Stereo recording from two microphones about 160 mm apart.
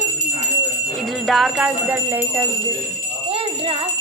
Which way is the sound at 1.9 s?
10° right (ahead or behind).